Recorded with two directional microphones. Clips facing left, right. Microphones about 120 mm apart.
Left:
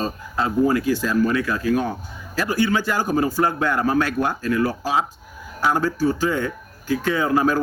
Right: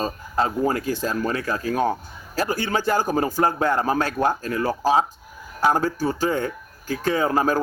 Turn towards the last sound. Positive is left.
turn(degrees=-40)  # may be behind; listen again after turning